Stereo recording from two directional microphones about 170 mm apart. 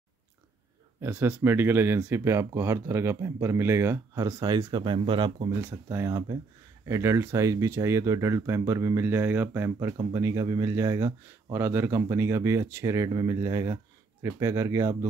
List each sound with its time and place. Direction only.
1.0 s speech: 10° right (ahead or behind); by 5.5 s 30° right (ahead or behind)
5.5 s speech: 15° right (ahead or behind)